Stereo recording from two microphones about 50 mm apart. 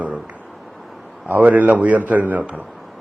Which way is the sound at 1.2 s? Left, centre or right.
Right.